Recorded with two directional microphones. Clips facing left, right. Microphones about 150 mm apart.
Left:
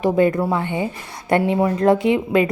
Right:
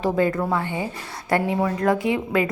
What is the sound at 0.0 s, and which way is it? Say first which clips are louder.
A woman's voice: left 4 dB; 15° left (ahead or behind).